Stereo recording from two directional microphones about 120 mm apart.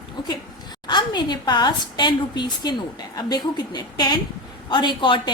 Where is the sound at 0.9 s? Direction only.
40° left (ahead or behind).